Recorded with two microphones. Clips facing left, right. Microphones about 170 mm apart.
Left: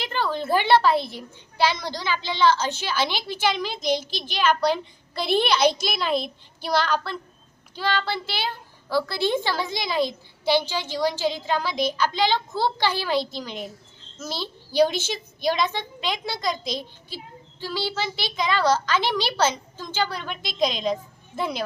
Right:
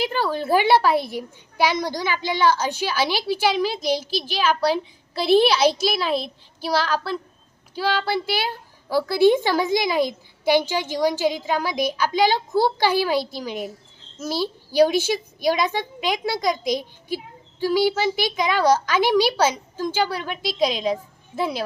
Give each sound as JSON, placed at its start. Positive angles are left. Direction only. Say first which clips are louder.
{"t": 0.0, "sound": "a woman's voice", "louder": "right 3 dB", "side_deg": -10}